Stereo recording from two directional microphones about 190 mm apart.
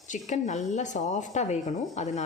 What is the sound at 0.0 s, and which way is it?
Speech, 40° left (ahead or behind).